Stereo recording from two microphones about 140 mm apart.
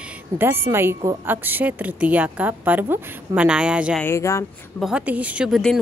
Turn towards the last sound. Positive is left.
turn(degrees=0)  # may be behind; listen again after turning